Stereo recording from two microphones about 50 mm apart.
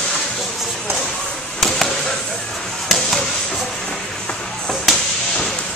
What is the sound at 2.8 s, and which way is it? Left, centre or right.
Basketball bounce, centre.